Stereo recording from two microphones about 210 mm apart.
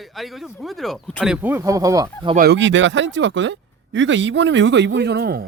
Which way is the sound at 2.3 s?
50° right (ahead or behind).